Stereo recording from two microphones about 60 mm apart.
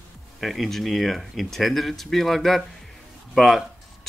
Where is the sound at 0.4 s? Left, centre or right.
Centre.